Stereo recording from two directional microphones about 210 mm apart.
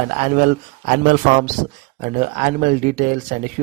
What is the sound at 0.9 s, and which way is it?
Speech, 40° right (ahead or behind).